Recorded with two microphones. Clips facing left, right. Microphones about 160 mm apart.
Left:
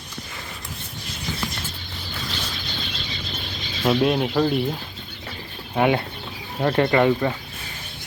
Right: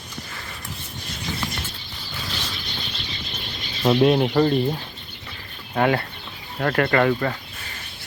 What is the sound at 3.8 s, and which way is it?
Speech, centre (ahead or behind).